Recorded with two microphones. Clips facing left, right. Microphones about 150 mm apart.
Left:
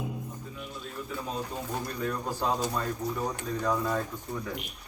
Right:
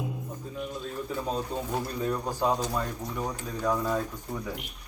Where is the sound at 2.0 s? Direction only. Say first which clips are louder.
Right 2 dB; 20° right (ahead or behind).